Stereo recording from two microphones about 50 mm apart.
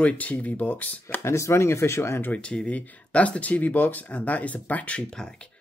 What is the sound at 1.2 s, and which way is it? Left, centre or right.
Speech, left.